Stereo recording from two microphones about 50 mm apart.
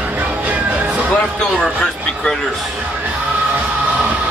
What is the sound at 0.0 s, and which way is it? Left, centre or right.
Music, right.